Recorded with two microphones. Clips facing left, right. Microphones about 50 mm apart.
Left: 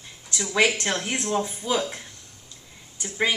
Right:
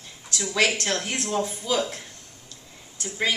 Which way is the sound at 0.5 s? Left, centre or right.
Centre.